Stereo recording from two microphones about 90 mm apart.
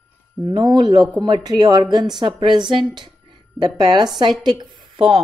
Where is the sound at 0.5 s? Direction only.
60° right (ahead or behind).